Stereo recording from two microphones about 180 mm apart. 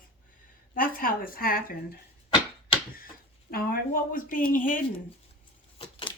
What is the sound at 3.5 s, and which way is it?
Speech, 55° left (ahead or behind).